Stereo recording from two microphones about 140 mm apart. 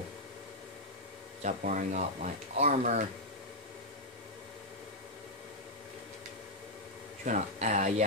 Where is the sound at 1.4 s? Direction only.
60° right (ahead or behind).